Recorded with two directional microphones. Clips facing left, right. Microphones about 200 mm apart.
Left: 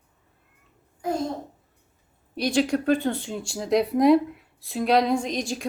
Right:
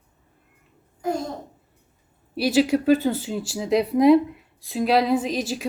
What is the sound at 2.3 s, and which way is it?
Speech, 5° right (ahead or behind).